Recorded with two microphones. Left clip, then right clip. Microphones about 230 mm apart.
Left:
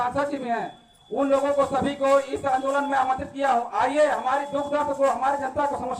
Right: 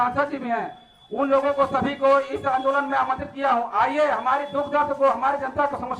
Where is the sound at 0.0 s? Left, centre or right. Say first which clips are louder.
Right 2 dB; left.